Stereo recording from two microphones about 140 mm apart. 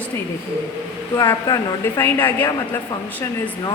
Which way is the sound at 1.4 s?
20° left (ahead or behind).